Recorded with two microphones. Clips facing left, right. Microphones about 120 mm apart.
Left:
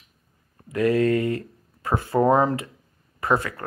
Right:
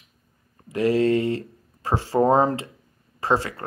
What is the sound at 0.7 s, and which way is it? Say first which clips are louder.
Speech: even; 25° right (ahead or behind).